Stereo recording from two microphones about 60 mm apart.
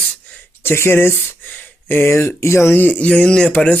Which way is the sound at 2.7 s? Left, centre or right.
Left.